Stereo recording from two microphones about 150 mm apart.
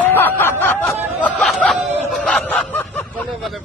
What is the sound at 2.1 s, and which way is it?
Snicker, 5° left (ahead or behind).